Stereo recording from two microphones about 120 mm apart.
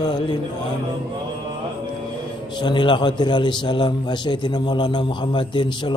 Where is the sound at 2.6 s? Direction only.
40° left (ahead or behind).